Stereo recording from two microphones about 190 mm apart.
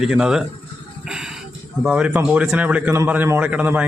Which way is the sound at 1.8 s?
5° right (ahead or behind).